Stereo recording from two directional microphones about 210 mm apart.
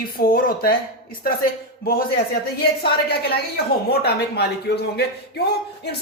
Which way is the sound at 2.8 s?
50° left (ahead or behind).